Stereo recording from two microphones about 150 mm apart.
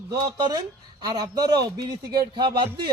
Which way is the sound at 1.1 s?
25° right (ahead or behind).